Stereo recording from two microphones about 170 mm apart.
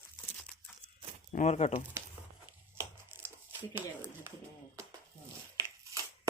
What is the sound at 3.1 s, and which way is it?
Crumpling, 15° right (ahead or behind).